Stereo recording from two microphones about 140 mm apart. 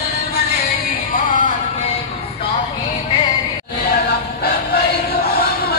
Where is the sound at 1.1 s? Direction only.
75° left (ahead or behind).